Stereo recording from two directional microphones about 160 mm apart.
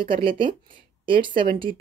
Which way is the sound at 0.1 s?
30° right (ahead or behind).